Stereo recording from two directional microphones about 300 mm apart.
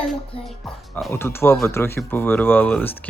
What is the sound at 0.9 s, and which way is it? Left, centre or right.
Speech, centre.